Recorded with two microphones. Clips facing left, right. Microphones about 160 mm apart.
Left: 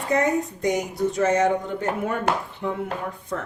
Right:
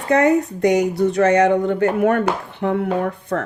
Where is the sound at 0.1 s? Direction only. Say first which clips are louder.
Right 7 dB; 70° right (ahead or behind).